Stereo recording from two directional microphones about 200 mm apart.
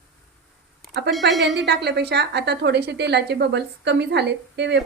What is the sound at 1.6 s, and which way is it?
Speech, 55° right (ahead or behind).